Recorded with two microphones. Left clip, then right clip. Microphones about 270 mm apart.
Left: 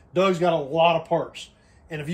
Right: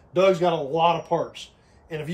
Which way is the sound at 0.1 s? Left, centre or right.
Centre.